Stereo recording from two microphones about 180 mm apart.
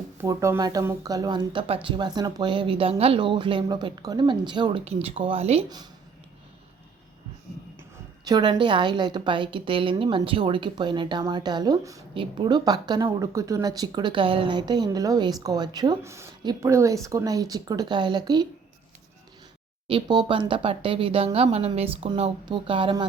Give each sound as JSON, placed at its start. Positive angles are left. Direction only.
{"t": 0.2, "sound": "speech", "side_deg": -15}
{"t": 5.6, "sound": "speech", "side_deg": -25}
{"t": 8.2, "sound": "speech", "side_deg": -25}
{"t": 19.9, "sound": "speech", "side_deg": -25}